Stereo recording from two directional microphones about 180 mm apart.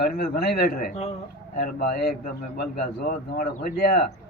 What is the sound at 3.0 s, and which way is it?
Speech, 50° left (ahead or behind).